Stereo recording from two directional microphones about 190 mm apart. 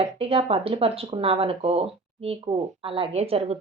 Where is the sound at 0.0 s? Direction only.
30° right (ahead or behind).